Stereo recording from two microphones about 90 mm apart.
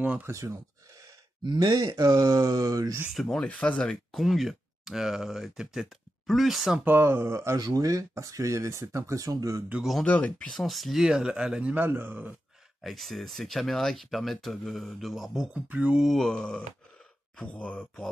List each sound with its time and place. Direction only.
0.2 s a sound: 30° right (ahead or behind)
1.6 s speech: 45° right (ahead or behind)
3.1 s speech: centre (ahead or behind)
6.8 s speech: 25° right (ahead or behind)
7.5 s speech: 45° right (ahead or behind)
10.0 s speech: 15° left (ahead or behind)
10.5 s speech: centre (ahead or behind)
11.7 s speech: 25° right (ahead or behind)
12.8 s speech: centre (ahead or behind); by 16.1 s 15° right (ahead or behind)
16.1 s speech: 5° left (ahead or behind)